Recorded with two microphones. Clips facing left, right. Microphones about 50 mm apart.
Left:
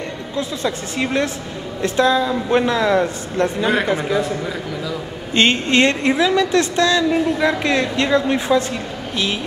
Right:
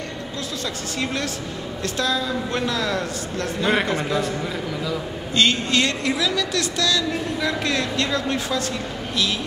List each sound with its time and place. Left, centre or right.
0.4 s a woman's voice: left
3.8 s a man's voice: centre
5.3 s a woman's voice: left